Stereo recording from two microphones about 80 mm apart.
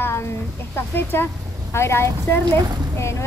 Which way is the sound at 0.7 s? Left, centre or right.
Left.